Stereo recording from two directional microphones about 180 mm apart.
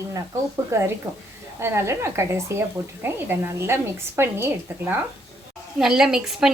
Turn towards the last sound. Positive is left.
turn(degrees=-5)  # may be behind; listen again after turning